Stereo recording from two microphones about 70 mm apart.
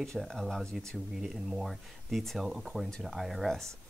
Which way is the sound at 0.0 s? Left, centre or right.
Centre.